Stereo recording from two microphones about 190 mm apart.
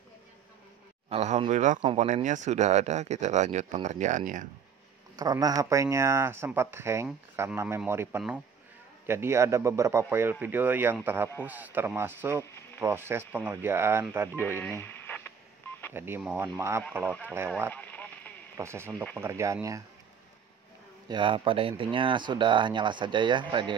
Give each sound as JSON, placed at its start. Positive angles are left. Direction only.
{"t": 1.1, "sound": "speech", "side_deg": -35}
{"t": 5.1, "sound": "speech", "side_deg": -20}
{"t": 12.4, "sound": "a sound", "side_deg": 15}
{"t": 12.8, "sound": "speech", "side_deg": -10}
{"t": 14.8, "sound": "radio", "side_deg": 10}
{"t": 15.9, "sound": "speech", "side_deg": -10}
{"t": 17.7, "sound": "a sound", "side_deg": 10}
{"t": 18.6, "sound": "speech", "side_deg": -15}
{"t": 21.1, "sound": "speech", "side_deg": -25}